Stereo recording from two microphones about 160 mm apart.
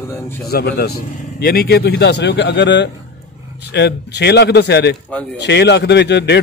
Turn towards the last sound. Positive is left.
turn(degrees=90)